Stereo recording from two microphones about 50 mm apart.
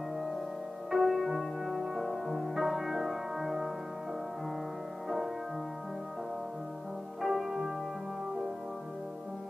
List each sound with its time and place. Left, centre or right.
0.8 s music: centre
7.2 s music: centre